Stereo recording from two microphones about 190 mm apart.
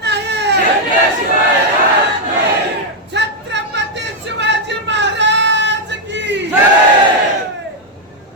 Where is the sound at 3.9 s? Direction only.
65° right (ahead or behind).